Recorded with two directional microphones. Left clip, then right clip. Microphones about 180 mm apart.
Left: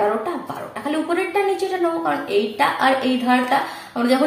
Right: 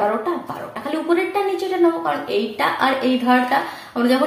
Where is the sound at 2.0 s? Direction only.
30° right (ahead or behind).